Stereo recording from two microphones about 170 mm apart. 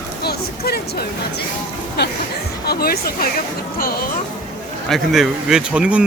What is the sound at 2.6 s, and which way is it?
Speech, 65° left (ahead or behind).